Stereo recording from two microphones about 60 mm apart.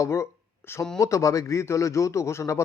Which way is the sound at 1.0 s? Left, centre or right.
Left.